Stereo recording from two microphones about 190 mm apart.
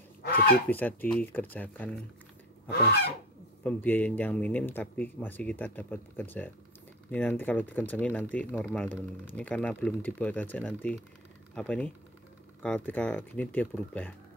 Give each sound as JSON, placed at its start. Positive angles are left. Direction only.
{"t": 0.2, "sound": "goose", "side_deg": 55}
{"t": 0.7, "sound": "speech", "side_deg": 10}
{"t": 3.6, "sound": "speech", "side_deg": 10}